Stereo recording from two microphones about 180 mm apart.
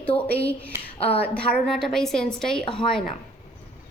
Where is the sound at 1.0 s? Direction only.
35° left (ahead or behind).